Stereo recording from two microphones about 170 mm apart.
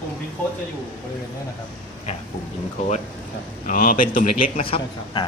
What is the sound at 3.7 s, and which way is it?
Speech, 55° left (ahead or behind).